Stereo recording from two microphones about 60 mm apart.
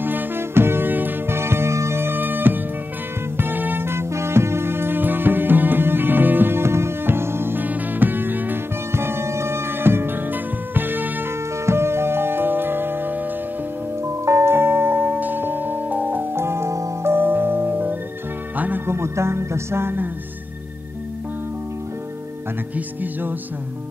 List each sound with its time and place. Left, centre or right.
0.0 s music: right
8.9 s music: right
11.6 s music: right
14.0 s music: right
16.3 s music: right
17.1 s music: right
18.9 s music: right